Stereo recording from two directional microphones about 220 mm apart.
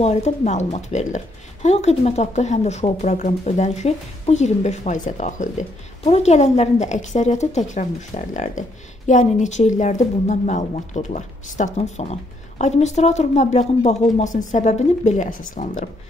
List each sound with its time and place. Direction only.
0.0 s a woman's voice: 30° left (ahead or behind)